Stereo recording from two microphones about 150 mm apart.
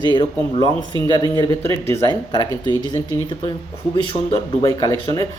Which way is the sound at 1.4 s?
20° left (ahead or behind).